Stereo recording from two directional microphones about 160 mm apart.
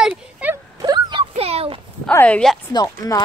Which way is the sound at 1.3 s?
40° right (ahead or behind).